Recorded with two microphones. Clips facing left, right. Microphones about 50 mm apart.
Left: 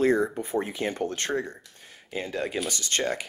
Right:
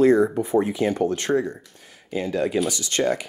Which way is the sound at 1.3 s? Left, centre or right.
Right.